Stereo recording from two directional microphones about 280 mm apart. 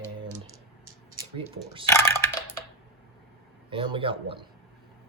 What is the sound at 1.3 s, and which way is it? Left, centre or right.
Speech, centre.